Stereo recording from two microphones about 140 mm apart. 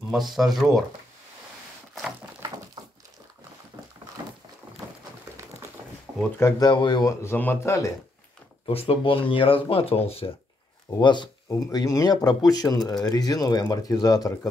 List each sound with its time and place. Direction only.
0.4 s speech: centre (ahead or behind)
6.1 s a sound: 25° right (ahead or behind)
6.4 s speech: 30° left (ahead or behind)
7.2 s speech: 15° left (ahead or behind)
8.6 s speech: 40° left (ahead or behind)
11.0 s speech: 35° left (ahead or behind)